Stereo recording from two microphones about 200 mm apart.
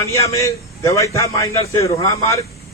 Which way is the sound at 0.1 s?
15° left (ahead or behind).